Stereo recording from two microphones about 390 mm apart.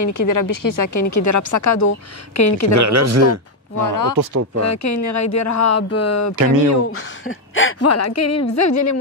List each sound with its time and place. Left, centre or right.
0.0 s speech: left
2.7 s speech: right
3.8 s speech: left
4.6 s a woman's voice: left